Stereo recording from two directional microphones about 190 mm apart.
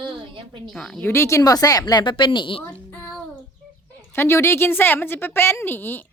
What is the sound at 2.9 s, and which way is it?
A woman's voice, 10° left (ahead or behind).